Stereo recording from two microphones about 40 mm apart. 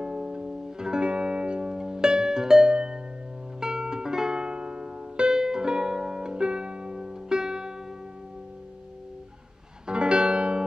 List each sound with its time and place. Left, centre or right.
0.0 s music: centre
2.7 s music: right
9.8 s music: right